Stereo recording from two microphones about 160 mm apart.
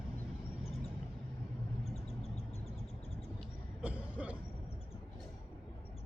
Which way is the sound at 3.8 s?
10° right (ahead or behind).